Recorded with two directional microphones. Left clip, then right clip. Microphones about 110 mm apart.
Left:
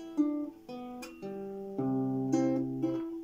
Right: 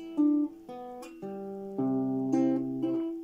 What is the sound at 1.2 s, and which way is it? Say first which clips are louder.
Music: right 1 dB; 15° right (ahead or behind).